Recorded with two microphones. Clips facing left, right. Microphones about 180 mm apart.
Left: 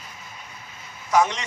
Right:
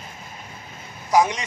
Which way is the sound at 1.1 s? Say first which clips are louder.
Right 2 dB; 15° right (ahead or behind).